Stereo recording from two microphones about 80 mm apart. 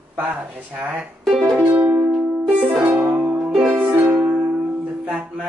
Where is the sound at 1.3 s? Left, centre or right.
Centre.